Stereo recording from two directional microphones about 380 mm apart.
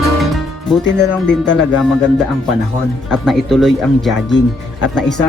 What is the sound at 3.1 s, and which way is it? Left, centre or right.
Speech, centre.